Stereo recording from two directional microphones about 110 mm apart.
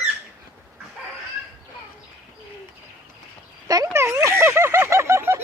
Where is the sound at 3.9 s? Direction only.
25° right (ahead or behind).